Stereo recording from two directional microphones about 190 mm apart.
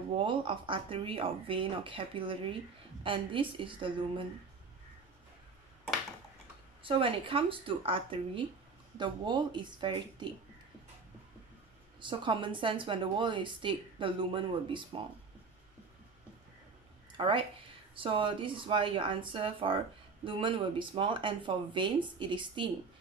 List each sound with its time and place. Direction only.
0.1 s a woman's voice: 25° right (ahead or behind)
6.8 s a woman's voice: 25° right (ahead or behind)
12.1 s a woman's voice: 25° right (ahead or behind)
17.2 s a woman's voice: 25° right (ahead or behind)